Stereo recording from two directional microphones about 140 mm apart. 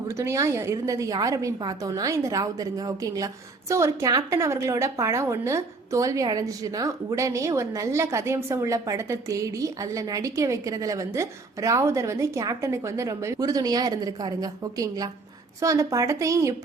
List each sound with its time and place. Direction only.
0.2 s a woman's voice: 20° right (ahead or behind)